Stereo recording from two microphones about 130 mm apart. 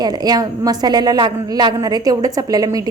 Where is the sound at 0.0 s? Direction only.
30° right (ahead or behind).